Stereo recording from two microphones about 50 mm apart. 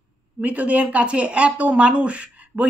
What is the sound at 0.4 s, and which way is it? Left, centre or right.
A woman's voice, right.